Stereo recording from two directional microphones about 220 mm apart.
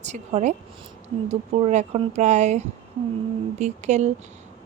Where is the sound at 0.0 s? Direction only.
30° right (ahead or behind).